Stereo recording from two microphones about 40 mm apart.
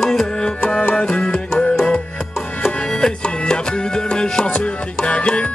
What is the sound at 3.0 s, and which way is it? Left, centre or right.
Music, left.